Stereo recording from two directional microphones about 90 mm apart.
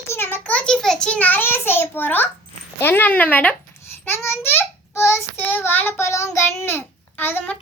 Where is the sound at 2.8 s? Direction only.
20° left (ahead or behind).